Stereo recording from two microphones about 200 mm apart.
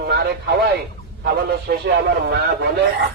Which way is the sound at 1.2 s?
50° right (ahead or behind).